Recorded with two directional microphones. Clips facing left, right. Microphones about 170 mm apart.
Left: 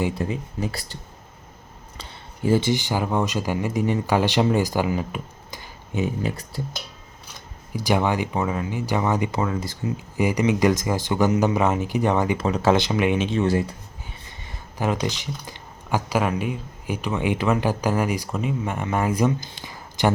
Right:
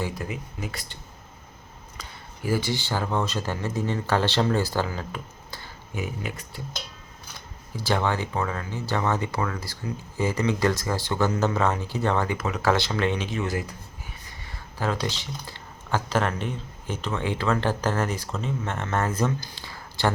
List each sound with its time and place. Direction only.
0.0 s speech: 30° left (ahead or behind)
2.0 s speech: 25° left (ahead or behind)
7.7 s speech: 15° left (ahead or behind)
12.4 s speech: 30° left (ahead or behind)
12.7 s speech: 15° left (ahead or behind)
14.4 s speech: 20° left (ahead or behind)
19.5 s a sound: 15° left (ahead or behind)